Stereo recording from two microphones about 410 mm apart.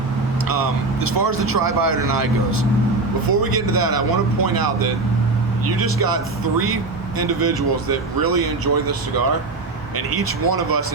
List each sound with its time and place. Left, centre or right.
0.4 s vehicle: right
1.5 s speech: right
3.2 s speech: right